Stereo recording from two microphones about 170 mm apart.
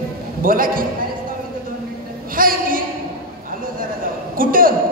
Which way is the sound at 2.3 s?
55° right (ahead or behind).